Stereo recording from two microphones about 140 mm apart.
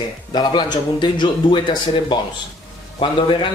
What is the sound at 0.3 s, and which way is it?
A man's voice, 30° left (ahead or behind).